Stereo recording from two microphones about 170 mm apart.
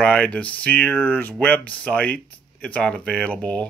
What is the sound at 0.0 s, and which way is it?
Speech, 10° left (ahead or behind).